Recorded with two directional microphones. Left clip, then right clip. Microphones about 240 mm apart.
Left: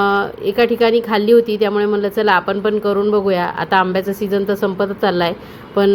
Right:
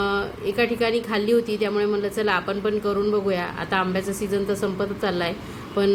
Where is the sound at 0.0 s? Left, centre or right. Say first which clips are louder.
Left 8 dB; centre.